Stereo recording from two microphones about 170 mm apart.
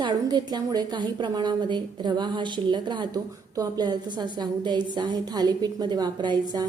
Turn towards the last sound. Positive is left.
turn(degrees=-25)  # may be behind; listen again after turning